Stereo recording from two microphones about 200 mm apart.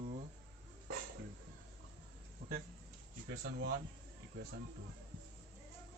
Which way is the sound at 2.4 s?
35° right (ahead or behind).